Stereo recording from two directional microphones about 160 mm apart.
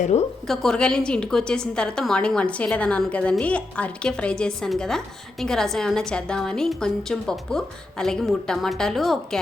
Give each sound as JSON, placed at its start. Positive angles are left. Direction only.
{"t": 0.0, "sound": "a woman's voice", "side_deg": 45}
{"t": 0.4, "sound": "a woman's voice", "side_deg": 0}